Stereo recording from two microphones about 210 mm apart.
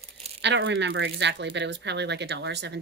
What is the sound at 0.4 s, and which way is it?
Speech, 60° right (ahead or behind).